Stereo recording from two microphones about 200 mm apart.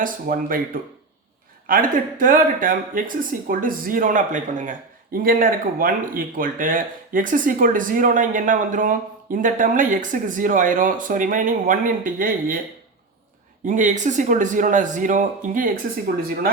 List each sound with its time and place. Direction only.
0.0 s speech: 45° right (ahead or behind)
13.7 s speech: 40° right (ahead or behind)